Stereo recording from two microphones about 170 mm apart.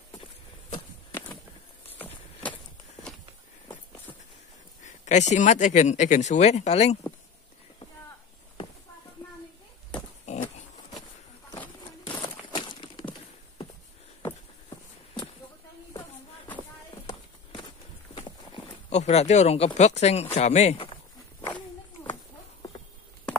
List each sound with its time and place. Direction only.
1.9 s vehicle: 10° left (ahead or behind)
4.8 s speech: 45° left (ahead or behind)
10.3 s pig: 40° left (ahead or behind)
12.1 s a sound: 30° left (ahead or behind)
17.1 s a sound: 30° left (ahead or behind)
18.9 s speech: 40° left (ahead or behind)